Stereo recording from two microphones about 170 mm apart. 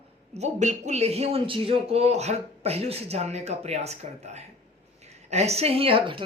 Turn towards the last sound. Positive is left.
turn(degrees=-30)  # may be behind; listen again after turning